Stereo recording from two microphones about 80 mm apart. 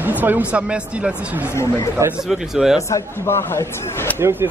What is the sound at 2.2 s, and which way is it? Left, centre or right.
Speech, centre.